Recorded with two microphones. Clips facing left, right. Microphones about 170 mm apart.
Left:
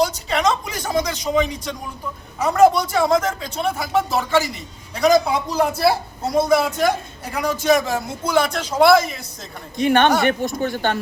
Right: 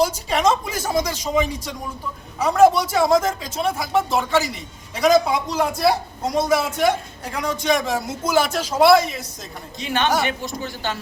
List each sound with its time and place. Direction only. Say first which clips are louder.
0.0 s speech: even; 10° right (ahead or behind)
9.7 s speech: left 5 dB; 55° left (ahead or behind)